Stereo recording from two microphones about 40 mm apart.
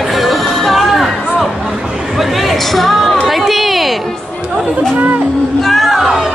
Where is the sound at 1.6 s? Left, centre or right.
Centre.